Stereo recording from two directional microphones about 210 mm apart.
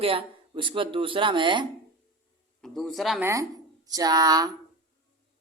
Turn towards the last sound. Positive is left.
turn(degrees=-20)  # may be behind; listen again after turning